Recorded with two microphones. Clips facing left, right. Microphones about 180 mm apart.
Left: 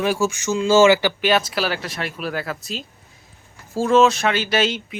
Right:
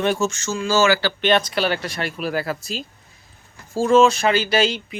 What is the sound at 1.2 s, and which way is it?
Speech, 5° left (ahead or behind).